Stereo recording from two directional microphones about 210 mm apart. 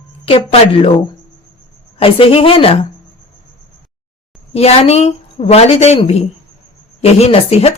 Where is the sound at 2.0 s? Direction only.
25° left (ahead or behind).